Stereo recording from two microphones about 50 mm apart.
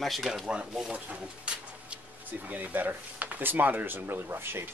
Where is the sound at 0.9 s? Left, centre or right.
Right.